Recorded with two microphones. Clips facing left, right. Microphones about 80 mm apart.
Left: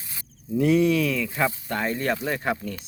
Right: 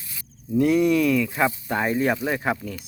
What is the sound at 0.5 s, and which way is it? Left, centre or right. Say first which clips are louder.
Speech: right 1 dB; centre.